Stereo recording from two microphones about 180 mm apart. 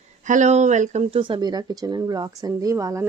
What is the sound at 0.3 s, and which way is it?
A woman's voice, 40° right (ahead or behind).